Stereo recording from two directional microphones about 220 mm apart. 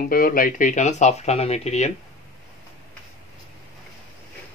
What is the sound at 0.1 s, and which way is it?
Speech, 40° left (ahead or behind).